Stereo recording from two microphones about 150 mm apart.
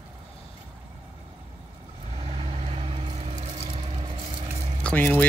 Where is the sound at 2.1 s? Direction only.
40° right (ahead or behind).